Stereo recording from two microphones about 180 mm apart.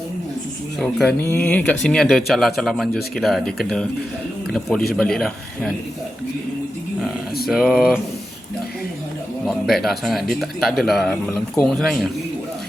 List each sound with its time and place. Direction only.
0.8 s speech: centre (ahead or behind)
7.4 s speech: centre (ahead or behind)
9.6 s speech: centre (ahead or behind)